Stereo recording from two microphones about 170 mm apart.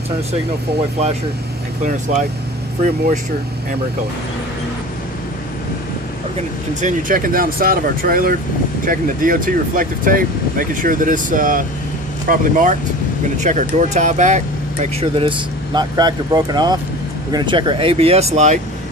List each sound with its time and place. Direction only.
1.8 s speech: 45° right (ahead or behind)
6.8 s speech: 55° right (ahead or behind)
15.0 s speech: 30° right (ahead or behind)